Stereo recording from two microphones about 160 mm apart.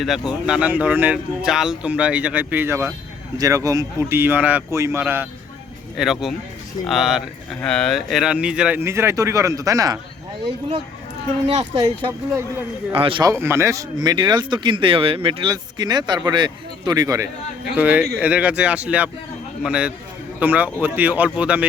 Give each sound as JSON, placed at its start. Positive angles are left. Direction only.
{"t": 0.3, "sound": "speech", "side_deg": -5}
{"t": 6.0, "sound": "speech", "side_deg": 0}
{"t": 8.8, "sound": "speech", "side_deg": -15}
{"t": 11.4, "sound": "speech", "side_deg": -40}
{"t": 13.4, "sound": "speech", "side_deg": -15}
{"t": 17.7, "sound": "speech", "side_deg": -10}